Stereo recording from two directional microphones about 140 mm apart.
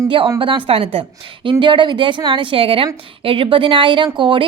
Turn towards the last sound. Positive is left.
turn(degrees=-35)  # may be behind; listen again after turning